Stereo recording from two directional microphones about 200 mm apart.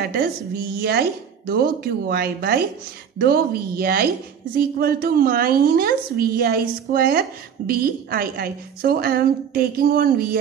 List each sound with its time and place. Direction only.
0.7 s a woman's voice: 50° right (ahead or behind)